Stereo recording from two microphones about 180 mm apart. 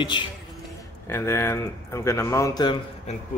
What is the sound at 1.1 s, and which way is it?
Speech, 15° left (ahead or behind).